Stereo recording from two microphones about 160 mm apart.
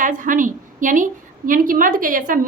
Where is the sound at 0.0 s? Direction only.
55° right (ahead or behind).